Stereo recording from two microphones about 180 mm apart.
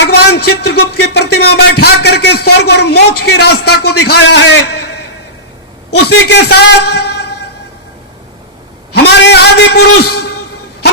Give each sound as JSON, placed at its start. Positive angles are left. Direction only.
{"t": 0.0, "sound": "speech", "side_deg": 65}
{"t": 6.0, "sound": "speech", "side_deg": 65}
{"t": 8.9, "sound": "a sound", "side_deg": 65}